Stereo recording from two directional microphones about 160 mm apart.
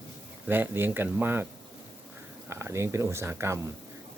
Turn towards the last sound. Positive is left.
turn(degrees=-15)  # may be behind; listen again after turning